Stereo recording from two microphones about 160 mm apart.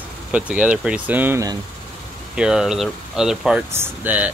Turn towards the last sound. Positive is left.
turn(degrees=-10)  # may be behind; listen again after turning